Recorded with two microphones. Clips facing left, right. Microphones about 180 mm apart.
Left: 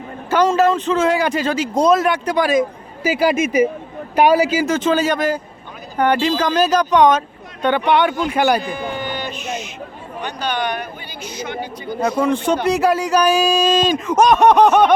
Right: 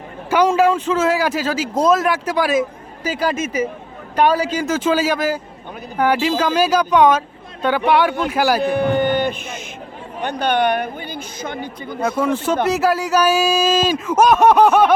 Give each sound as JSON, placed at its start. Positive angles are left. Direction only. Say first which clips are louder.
{"t": 0.3, "sound": "speech", "louder": "even", "side_deg": -10}
{"t": 3.0, "sound": "speech", "louder": "left 4 dB", "side_deg": 10}
{"t": 4.7, "sound": "speech", "louder": "left 1 dB", "side_deg": -10}
{"t": 8.6, "sound": "speech", "louder": "right 8 dB", "side_deg": -60}
{"t": 12.0, "sound": "speech", "louder": "left 1 dB", "side_deg": -5}